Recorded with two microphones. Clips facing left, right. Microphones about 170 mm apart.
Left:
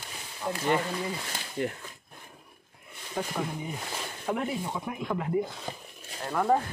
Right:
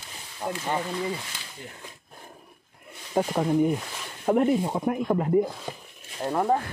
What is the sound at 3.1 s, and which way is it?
Speech, 55° right (ahead or behind).